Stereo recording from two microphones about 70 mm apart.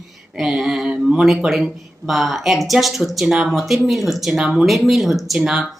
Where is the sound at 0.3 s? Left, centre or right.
Centre.